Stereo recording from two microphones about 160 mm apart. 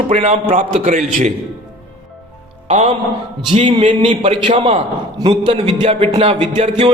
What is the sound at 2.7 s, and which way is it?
Speech, 45° right (ahead or behind).